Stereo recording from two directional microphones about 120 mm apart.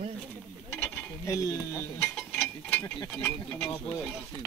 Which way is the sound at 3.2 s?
20° left (ahead or behind).